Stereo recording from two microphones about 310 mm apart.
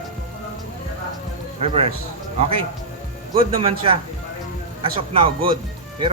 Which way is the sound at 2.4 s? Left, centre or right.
Centre.